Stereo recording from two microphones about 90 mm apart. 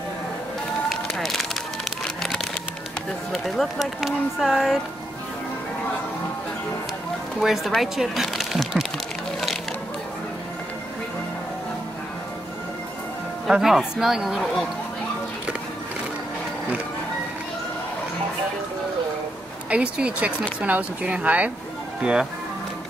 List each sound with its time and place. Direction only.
0.8 s music: centre (ahead or behind)
3.3 s speech: 5° left (ahead or behind)
7.3 s speech: centre (ahead or behind)
13.5 s speech: 5° right (ahead or behind)
19.7 s speech: 10° right (ahead or behind)